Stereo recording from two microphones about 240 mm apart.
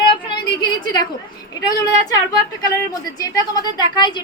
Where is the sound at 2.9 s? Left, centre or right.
Centre.